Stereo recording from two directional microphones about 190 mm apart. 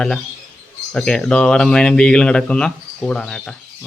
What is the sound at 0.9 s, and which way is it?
Speech, 5° left (ahead or behind).